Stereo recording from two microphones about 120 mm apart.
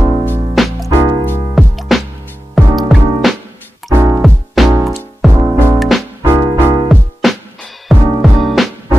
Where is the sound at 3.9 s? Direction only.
25° right (ahead or behind).